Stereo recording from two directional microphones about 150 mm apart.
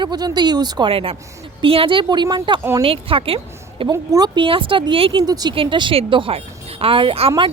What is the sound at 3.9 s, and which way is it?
Speech, 25° right (ahead or behind).